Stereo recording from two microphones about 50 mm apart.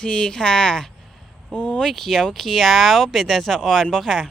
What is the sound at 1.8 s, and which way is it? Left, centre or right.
Speech, centre.